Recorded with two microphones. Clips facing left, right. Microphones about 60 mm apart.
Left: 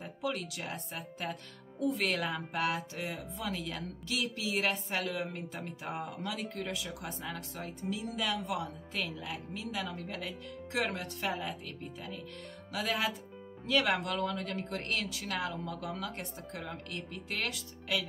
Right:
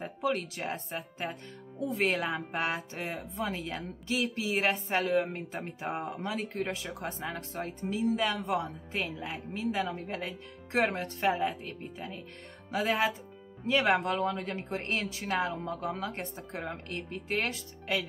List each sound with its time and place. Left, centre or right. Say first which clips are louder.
0.0 s speech: right 5 dB; right